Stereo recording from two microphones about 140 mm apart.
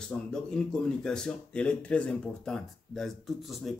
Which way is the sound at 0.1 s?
10° left (ahead or behind).